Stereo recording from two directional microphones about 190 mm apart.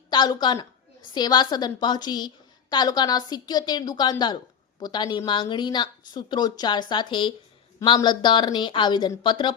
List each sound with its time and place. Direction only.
0.1 s a woman's voice: 20° left (ahead or behind)